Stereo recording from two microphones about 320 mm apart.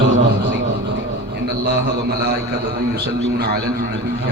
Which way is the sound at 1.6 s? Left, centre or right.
Right.